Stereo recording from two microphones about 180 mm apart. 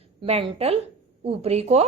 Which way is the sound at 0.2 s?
35° right (ahead or behind).